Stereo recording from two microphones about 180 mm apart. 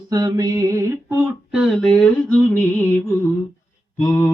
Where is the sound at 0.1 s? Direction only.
20° right (ahead or behind).